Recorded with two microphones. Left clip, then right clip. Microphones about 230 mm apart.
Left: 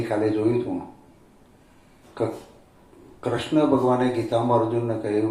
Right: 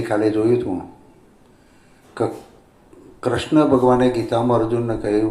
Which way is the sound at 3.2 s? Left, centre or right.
Right.